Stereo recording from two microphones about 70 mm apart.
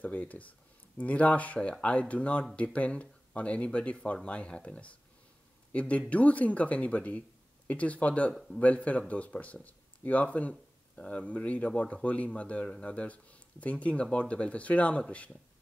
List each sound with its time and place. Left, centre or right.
0.0 s speech: left